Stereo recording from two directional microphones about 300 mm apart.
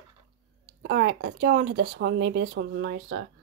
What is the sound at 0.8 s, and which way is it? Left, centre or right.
Speech, right.